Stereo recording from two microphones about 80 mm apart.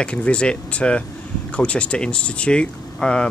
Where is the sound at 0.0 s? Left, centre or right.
Centre.